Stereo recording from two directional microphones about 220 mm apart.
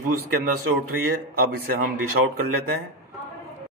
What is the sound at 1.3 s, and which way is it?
Speech, 40° right (ahead or behind).